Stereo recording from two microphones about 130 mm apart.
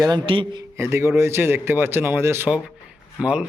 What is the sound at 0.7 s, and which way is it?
A man's voice, 20° right (ahead or behind).